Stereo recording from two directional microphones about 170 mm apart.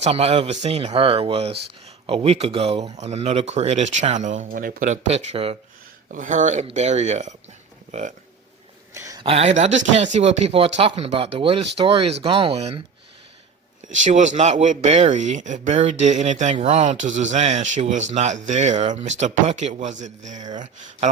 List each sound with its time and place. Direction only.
0.0 s speech: 35° right (ahead or behind)
6.1 s speech: 50° right (ahead or behind)
8.9 s a sound: 20° right (ahead or behind)
9.2 s speech: 35° right (ahead or behind)
14.0 s speech: 45° right (ahead or behind)